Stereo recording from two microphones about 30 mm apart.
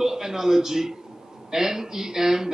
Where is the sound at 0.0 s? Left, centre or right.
Centre.